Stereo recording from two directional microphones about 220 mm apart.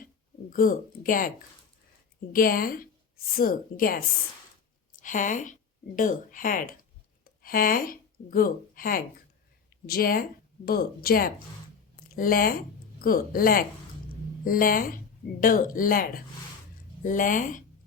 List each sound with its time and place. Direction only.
0.5 s a woman's voice: 40° left (ahead or behind)
2.3 s a woman's voice: 40° left (ahead or behind)